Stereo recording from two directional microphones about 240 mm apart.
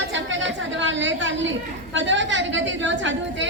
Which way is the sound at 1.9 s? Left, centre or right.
Right.